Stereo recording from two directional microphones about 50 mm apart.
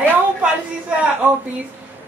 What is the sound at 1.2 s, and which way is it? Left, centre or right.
Speech, right.